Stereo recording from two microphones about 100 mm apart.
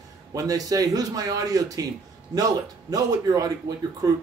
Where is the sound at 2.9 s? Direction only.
40° right (ahead or behind).